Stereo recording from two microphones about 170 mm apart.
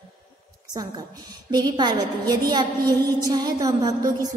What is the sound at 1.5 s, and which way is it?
A woman's voice, 25° right (ahead or behind).